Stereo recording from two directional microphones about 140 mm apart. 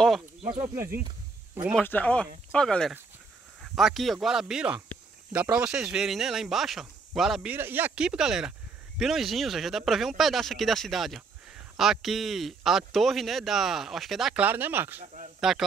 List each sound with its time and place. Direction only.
0.7 s speech: 15° right (ahead or behind)
1.8 s speech: 10° left (ahead or behind)
7.5 s speech: 15° right (ahead or behind)
14.4 s speech: 15° right (ahead or behind)
15.5 s speech: centre (ahead or behind)